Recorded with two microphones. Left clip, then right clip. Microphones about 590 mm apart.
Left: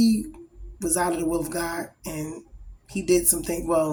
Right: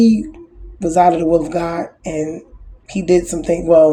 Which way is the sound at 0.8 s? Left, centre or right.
Left.